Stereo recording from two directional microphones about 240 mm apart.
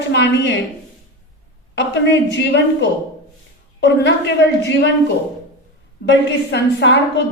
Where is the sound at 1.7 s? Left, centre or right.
Left.